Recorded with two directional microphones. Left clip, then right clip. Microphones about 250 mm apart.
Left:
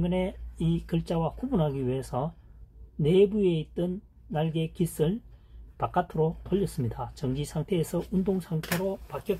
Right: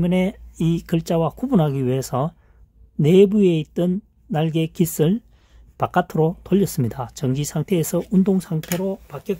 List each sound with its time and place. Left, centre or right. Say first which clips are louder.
0.0 s speech: right 7 dB; right